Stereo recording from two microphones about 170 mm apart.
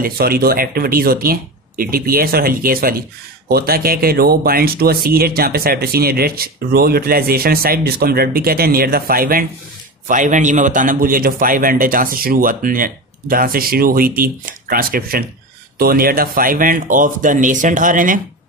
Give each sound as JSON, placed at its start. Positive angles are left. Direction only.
{"t": 0.0, "sound": "speech", "side_deg": -60}